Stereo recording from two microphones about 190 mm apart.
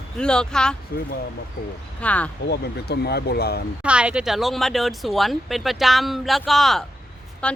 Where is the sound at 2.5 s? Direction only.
60° left (ahead or behind).